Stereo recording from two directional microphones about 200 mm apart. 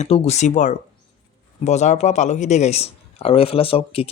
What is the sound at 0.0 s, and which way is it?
A man's voice, 35° left (ahead or behind).